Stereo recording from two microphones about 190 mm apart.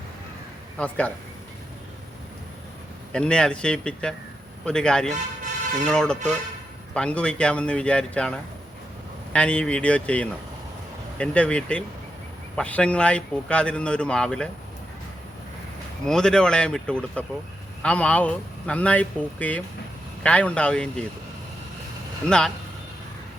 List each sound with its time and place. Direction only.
0.8 s speech: 5° left (ahead or behind)
3.1 s speech: 5° left (ahead or behind)
16.0 s speech: 5° left (ahead or behind)
22.3 s speech: 5° left (ahead or behind)